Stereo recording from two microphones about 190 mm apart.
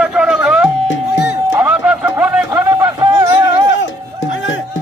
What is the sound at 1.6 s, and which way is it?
Run, 5° right (ahead or behind).